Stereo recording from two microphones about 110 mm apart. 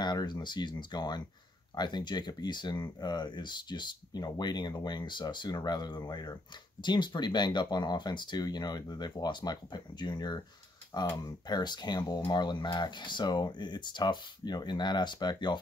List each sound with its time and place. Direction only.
0.0 s speech: 40° left (ahead or behind)